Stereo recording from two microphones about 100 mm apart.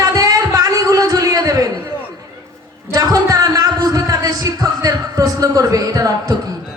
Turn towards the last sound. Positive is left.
turn(degrees=-35)  # may be behind; listen again after turning